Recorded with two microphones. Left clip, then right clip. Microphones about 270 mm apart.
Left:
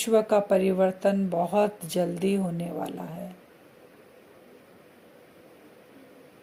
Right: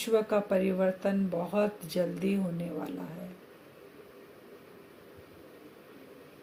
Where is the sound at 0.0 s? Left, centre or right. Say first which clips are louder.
Left 6 dB; left.